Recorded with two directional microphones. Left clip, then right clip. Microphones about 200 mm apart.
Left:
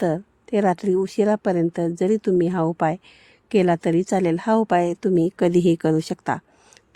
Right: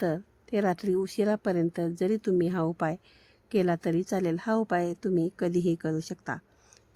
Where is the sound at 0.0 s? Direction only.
35° left (ahead or behind).